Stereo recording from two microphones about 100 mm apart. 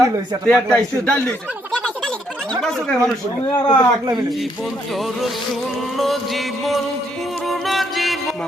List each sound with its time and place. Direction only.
0.4 s speech: 10° left (ahead or behind)
3.5 s speech: 45° left (ahead or behind)
6.0 s music: centre (ahead or behind)